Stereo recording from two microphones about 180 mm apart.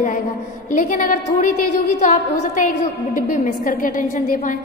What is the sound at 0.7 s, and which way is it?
A woman's voice, 45° left (ahead or behind).